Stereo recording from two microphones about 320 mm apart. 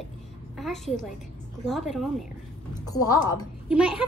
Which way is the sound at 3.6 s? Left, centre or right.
Centre.